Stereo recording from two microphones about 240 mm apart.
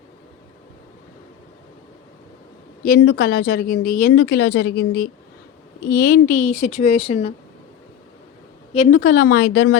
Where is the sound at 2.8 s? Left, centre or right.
Left.